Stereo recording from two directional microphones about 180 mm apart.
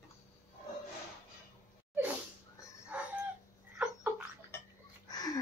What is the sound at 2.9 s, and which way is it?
Chicken, 10° right (ahead or behind).